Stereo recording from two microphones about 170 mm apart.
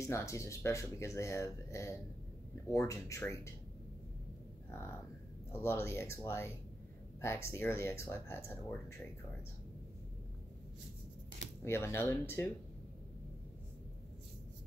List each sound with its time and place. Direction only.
0.0 s speech: 15° left (ahead or behind)
5.5 s speech: 15° left (ahead or behind)
11.6 s speech: 15° left (ahead or behind)